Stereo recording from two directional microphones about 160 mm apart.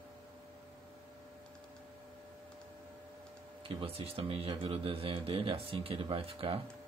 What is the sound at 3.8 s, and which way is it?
Speech, 35° right (ahead or behind).